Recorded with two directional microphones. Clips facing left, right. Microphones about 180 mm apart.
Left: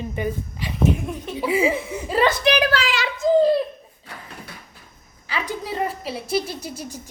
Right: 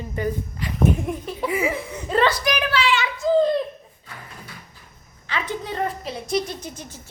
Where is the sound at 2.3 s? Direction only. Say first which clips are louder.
Left 4 dB; 25° left (ahead or behind).